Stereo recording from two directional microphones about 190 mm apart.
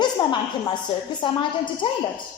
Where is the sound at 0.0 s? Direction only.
25° left (ahead or behind).